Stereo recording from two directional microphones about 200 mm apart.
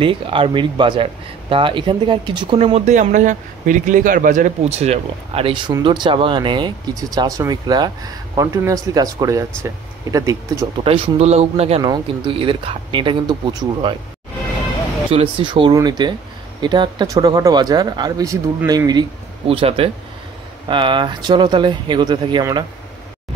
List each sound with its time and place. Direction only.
0.0 s speech: 25° right (ahead or behind)
10.8 s speech: 30° right (ahead or behind)
15.0 s speech: 25° right (ahead or behind)